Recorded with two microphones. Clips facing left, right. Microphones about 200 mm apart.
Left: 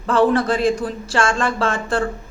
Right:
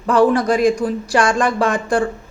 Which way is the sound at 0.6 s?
15° right (ahead or behind).